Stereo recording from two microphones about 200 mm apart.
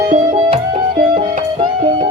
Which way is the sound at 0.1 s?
40° right (ahead or behind).